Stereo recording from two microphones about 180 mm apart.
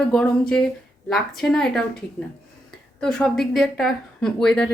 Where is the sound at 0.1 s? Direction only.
5° left (ahead or behind).